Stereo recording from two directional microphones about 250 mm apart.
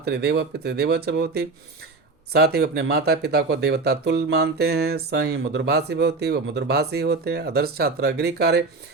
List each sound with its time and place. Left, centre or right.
0.0 s speech: right